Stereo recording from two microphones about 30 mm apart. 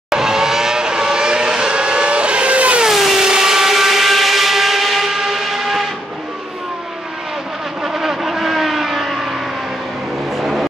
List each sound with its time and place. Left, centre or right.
0.1 s vehicle: centre; by 2.8 s right
2.9 s vehicle: centre
3.2 s vehicle: centre
7.8 s vehicle: centre
10.4 s vehicle: centre